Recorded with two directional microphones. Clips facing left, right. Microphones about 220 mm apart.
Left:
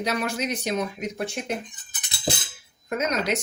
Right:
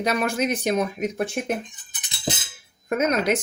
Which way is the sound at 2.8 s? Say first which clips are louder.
Right 4 dB; 55° right (ahead or behind).